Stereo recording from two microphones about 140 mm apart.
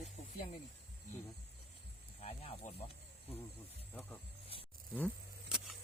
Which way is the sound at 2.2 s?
50° left (ahead or behind).